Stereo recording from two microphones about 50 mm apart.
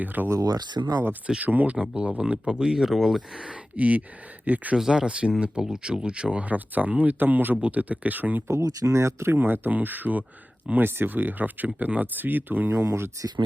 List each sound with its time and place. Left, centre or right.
0.0 s speech: right
0.8 s speech: right
1.4 s speech: right; by 3.5 s centre
3.5 s speech: right
4.8 s speech: centre
6.5 s speech: right
8.4 s speech: right
9.4 s speech: right
12.8 s speech: right